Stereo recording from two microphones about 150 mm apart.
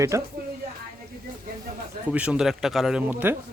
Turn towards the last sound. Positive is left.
turn(degrees=-10)  # may be behind; listen again after turning